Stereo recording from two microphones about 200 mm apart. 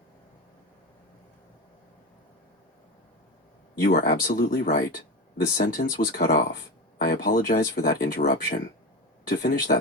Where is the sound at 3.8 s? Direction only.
55° left (ahead or behind).